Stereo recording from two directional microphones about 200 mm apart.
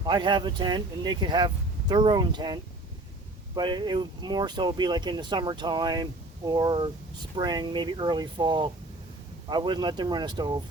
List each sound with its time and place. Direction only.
0.0 s speech: 25° right (ahead or behind)